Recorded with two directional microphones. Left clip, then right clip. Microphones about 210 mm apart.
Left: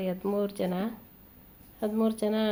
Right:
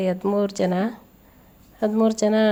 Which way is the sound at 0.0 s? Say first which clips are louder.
Right 8 dB; 30° right (ahead or behind).